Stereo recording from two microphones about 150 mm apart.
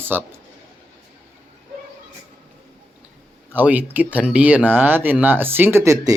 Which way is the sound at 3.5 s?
10° right (ahead or behind).